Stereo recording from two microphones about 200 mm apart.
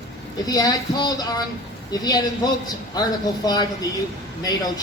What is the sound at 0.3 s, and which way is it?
Speech, 20° left (ahead or behind).